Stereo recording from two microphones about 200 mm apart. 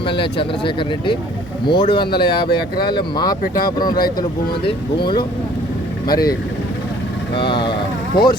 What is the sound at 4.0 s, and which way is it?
Speech, 45° left (ahead or behind).